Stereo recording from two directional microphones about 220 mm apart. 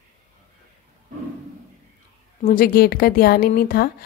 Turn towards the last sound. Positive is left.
turn(degrees=45)  # may be behind; listen again after turning